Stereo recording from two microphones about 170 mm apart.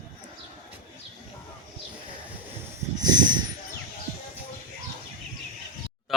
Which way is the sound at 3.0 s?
25° right (ahead or behind).